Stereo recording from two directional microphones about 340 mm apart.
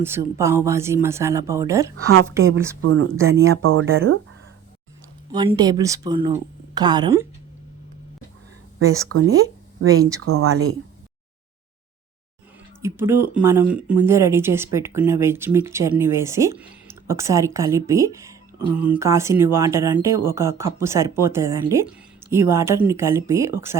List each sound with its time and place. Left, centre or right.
0.0 s speech: centre
2.0 s speech: right
5.3 s speech: centre
8.9 s speech: right
12.8 s speech: centre